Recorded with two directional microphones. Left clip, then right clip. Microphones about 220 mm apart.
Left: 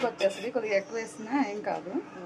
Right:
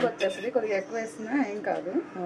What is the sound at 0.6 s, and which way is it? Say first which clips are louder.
A woman's voice: even; 15° left (ahead or behind).